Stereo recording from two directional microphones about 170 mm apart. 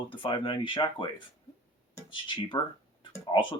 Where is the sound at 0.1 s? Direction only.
30° left (ahead or behind).